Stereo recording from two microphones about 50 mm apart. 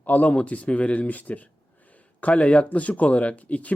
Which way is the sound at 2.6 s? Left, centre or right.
Left.